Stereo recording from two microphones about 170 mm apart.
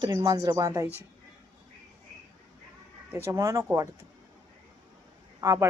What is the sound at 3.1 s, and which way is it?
Speech, 15° right (ahead or behind).